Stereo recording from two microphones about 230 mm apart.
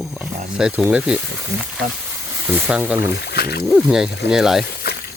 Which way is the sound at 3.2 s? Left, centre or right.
Left.